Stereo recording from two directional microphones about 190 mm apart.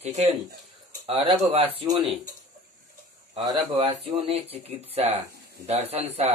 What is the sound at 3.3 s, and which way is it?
Speech, 20° right (ahead or behind).